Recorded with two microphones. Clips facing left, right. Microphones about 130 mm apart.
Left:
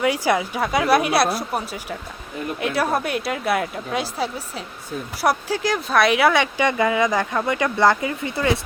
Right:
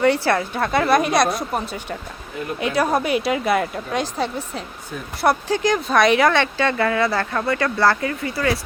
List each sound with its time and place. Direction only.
0.0 s speech: 10° left (ahead or behind)